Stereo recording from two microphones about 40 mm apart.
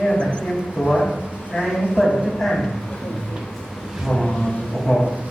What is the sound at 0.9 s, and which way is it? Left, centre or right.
A man's voice, centre.